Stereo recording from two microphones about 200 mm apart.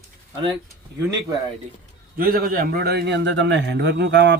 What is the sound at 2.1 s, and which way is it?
A man's voice, 50° right (ahead or behind).